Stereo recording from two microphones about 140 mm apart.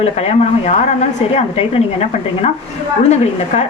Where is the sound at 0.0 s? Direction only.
50° left (ahead or behind).